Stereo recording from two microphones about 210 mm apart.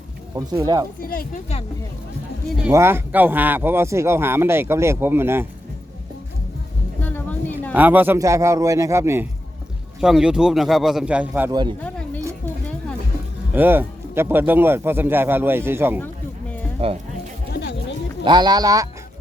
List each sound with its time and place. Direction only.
0.3 s speech: 15° right (ahead or behind)
1.0 s speech: 45° left (ahead or behind)
2.6 s speech: 10° right (ahead or behind)
7.0 s music: 10° left (ahead or behind)
7.7 s speech: 10° right (ahead or behind)
10.0 s a man's voice: 5° right (ahead or behind)
11.8 s a sound: 5° left (ahead or behind)
12.2 s a sound: 15° right (ahead or behind)
13.5 s speech: 10° right (ahead or behind)
16.8 s music: 30° right (ahead or behind)
17.5 s music: 55° left (ahead or behind)
18.2 s speech: 20° right (ahead or behind)